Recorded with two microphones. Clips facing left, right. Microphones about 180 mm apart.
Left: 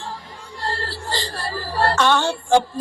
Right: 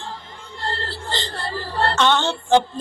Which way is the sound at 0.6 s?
25° right (ahead or behind).